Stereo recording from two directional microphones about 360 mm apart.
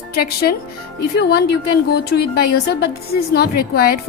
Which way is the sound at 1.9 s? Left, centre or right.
Left.